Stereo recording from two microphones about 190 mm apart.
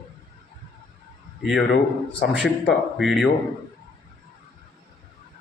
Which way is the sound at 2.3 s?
Centre (ahead or behind).